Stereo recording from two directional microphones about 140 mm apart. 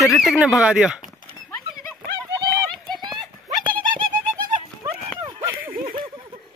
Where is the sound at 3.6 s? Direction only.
35° right (ahead or behind).